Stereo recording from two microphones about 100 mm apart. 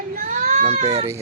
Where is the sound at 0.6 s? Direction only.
90° right.